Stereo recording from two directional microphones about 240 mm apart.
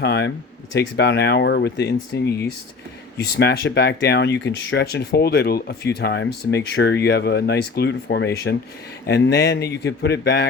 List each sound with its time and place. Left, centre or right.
0.0 s speech: left